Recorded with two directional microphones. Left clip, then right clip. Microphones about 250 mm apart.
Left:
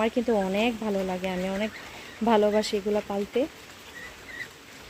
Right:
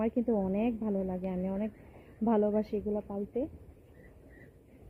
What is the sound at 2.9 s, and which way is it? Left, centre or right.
Speech, left.